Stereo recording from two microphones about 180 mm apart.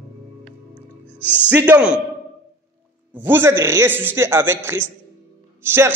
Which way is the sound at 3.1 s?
10° right (ahead or behind).